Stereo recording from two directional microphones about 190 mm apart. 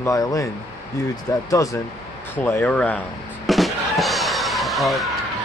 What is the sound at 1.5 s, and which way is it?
Speech, 20° left (ahead or behind).